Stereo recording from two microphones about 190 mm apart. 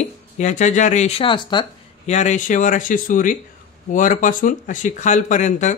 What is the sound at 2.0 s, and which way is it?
Speech, 35° left (ahead or behind).